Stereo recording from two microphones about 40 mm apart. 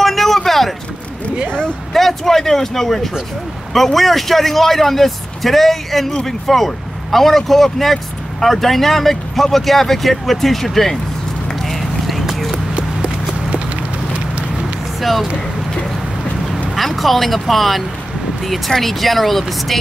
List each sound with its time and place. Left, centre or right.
0.0 s vehicle: centre
2.0 s speech: centre
11.6 s a sound: centre
12.7 s run: right
15.0 s speech: centre
16.7 s speech: centre